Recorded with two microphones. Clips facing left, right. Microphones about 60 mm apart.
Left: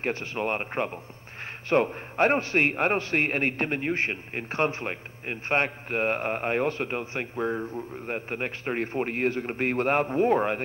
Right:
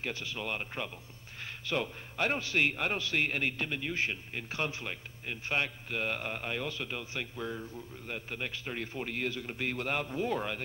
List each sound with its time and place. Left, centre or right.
0.0 s a man's voice: left